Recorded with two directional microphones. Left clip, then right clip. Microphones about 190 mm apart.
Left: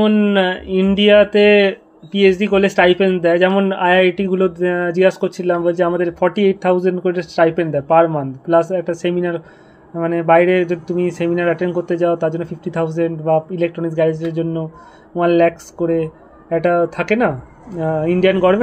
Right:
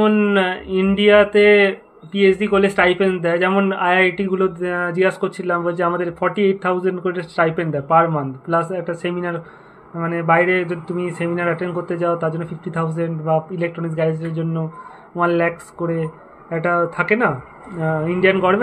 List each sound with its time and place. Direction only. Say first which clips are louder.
0.0 s speech: left 1 dB; 50° left (ahead or behind)